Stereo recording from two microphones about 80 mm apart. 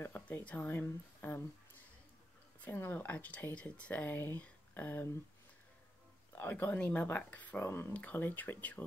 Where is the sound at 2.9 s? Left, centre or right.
Left.